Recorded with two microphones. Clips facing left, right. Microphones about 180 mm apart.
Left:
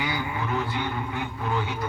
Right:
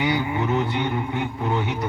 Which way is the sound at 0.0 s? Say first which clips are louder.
Right 7 dB; 25° right (ahead or behind).